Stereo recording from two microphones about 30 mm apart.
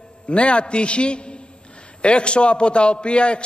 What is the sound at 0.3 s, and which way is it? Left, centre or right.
A man's voice, left.